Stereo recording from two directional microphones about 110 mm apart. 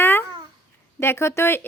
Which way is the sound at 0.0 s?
20° left (ahead or behind).